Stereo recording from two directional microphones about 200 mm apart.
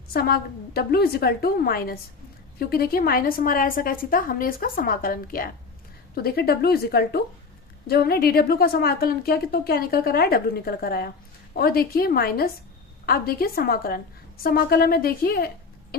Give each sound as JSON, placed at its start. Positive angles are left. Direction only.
{"t": 0.1, "sound": "a woman's voice", "side_deg": 50}